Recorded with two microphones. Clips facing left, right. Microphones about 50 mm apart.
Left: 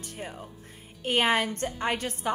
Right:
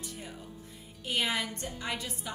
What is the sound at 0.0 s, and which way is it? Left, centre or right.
A woman's voice, left.